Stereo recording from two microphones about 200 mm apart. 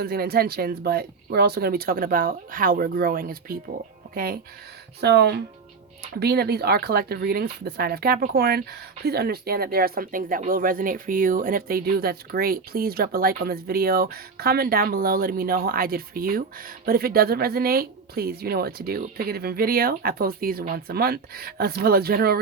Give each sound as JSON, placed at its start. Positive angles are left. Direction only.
{"t": 0.0, "sound": "speech", "side_deg": -50}